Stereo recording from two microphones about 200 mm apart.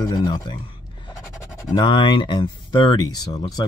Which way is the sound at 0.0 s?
20° left (ahead or behind).